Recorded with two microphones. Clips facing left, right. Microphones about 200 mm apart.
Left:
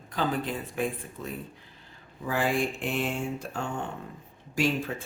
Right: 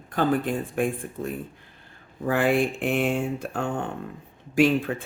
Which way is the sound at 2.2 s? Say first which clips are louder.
Right 5 dB; 60° right (ahead or behind).